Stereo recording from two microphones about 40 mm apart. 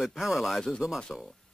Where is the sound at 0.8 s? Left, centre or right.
Right.